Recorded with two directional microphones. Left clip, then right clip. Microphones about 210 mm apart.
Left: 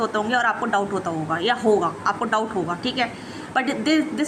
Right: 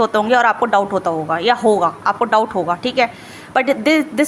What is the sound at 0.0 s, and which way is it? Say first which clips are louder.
A woman's voice: right 8 dB; 25° right (ahead or behind).